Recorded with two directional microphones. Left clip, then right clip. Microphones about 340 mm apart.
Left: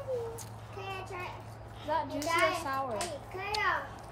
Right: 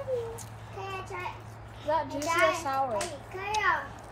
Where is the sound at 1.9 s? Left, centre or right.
Right.